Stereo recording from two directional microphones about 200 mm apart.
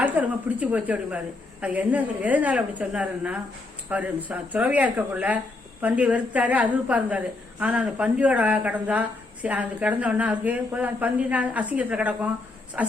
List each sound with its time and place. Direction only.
0.0 s a woman's voice: 10° right (ahead or behind)